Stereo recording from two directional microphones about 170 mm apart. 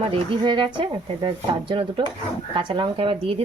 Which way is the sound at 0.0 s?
30° right (ahead or behind).